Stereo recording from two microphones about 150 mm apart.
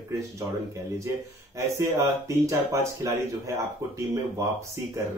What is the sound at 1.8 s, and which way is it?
Speech, 20° right (ahead or behind).